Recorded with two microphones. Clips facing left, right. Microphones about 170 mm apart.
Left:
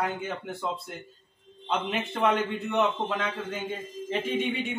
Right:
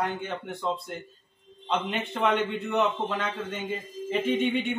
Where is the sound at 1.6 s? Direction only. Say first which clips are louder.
Even; centre (ahead or behind).